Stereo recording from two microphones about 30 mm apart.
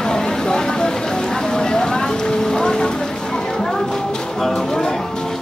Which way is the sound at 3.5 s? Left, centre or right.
Left.